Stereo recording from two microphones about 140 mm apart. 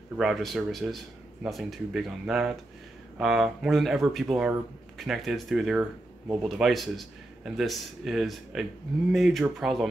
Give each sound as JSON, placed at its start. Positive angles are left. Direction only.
{"t": 0.2, "sound": "speech", "side_deg": 0}